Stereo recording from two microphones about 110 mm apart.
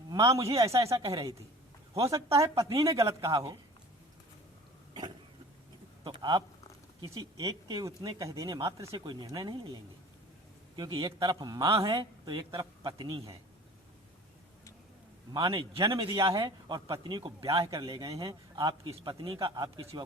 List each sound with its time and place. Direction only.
0.1 s a man's voice: 30° right (ahead or behind)
6.1 s speech: 40° right (ahead or behind)
9.0 s a man's voice: 40° right (ahead or behind)
15.4 s a man's voice: 55° right (ahead or behind)
15.8 s a man's voice: 30° right (ahead or behind)
16.6 s a man's voice: 45° right (ahead or behind)
17.4 s speech: 30° right (ahead or behind)
18.9 s a man's voice: 50° right (ahead or behind)
19.9 s speech: 40° right (ahead or behind)